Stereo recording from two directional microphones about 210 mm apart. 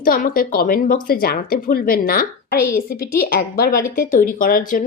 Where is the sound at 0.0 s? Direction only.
40° left (ahead or behind).